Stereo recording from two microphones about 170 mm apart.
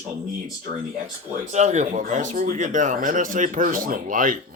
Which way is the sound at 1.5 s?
45° right (ahead or behind).